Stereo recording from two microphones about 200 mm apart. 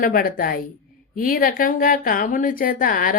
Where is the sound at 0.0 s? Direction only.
45° left (ahead or behind).